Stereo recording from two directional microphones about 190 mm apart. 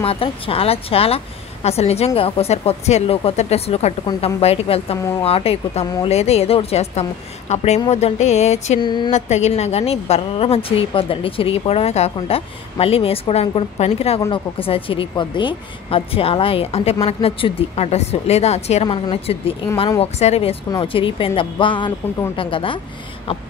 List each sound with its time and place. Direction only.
0.0 s a woman's voice: 30° left (ahead or behind)
8.8 s speech: 25° left (ahead or behind)
9.1 s a woman's voice: 35° left (ahead or behind)